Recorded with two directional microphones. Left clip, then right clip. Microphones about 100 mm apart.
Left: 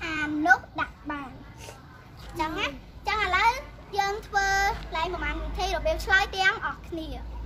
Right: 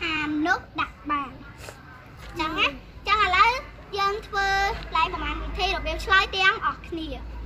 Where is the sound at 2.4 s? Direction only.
35° left (ahead or behind).